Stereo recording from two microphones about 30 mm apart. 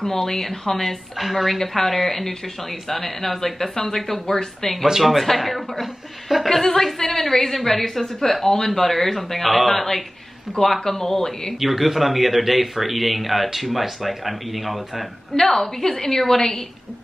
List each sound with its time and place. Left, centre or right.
0.0 s speech: centre
1.1 s a woman's voice: centre
11.6 s a woman's voice: centre
15.3 s speech: centre